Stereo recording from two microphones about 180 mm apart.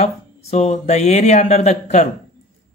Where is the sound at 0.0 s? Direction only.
40° left (ahead or behind).